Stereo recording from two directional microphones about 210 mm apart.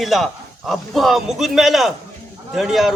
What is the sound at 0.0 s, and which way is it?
A man's voice, centre (ahead or behind).